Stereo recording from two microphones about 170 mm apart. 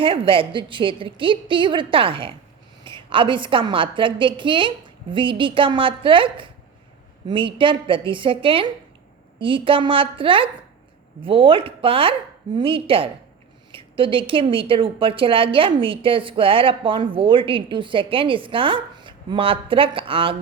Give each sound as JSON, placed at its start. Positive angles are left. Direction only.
{"t": 0.0, "sound": "a woman's voice", "side_deg": -30}